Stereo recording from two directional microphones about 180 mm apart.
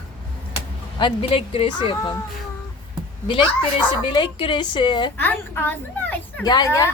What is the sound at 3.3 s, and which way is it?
A woman's voice, 25° left (ahead or behind).